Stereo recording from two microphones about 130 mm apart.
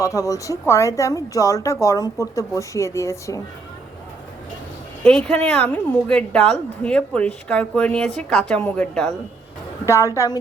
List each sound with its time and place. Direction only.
0.0 s speech: 25° left (ahead or behind)
5.0 s a woman's voice: 5° left (ahead or behind)
9.8 s speech: 25° left (ahead or behind)